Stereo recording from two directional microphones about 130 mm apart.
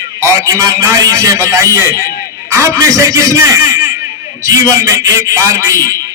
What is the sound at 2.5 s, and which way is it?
A man's voice, 25° right (ahead or behind).